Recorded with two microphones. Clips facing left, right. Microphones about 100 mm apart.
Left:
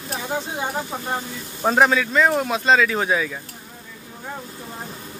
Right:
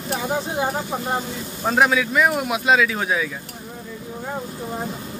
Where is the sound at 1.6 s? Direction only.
Centre (ahead or behind).